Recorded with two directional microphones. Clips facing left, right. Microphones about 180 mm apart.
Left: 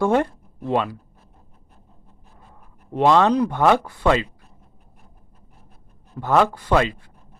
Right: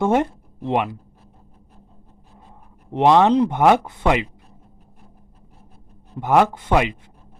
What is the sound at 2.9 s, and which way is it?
Speech, 20° right (ahead or behind).